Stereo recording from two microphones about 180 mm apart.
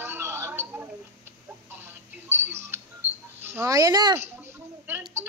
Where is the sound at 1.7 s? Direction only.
10° right (ahead or behind).